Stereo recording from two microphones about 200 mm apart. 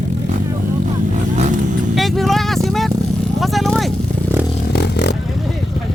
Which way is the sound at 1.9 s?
Centre (ahead or behind).